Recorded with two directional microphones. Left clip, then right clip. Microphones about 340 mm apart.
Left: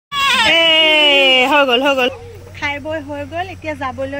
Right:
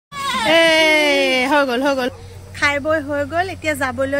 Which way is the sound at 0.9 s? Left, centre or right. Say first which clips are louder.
Left 4 dB; centre.